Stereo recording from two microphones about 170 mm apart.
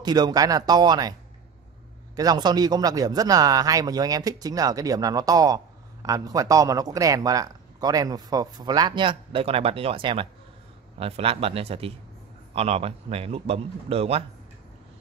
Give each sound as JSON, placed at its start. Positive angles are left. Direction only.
{"t": 0.0, "sound": "a man's voice", "side_deg": -25}
{"t": 2.1, "sound": "a man's voice", "side_deg": -25}